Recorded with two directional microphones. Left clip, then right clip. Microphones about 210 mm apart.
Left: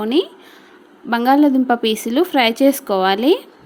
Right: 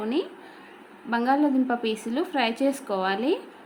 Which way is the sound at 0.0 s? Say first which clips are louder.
Left 10 dB; 40° left (ahead or behind).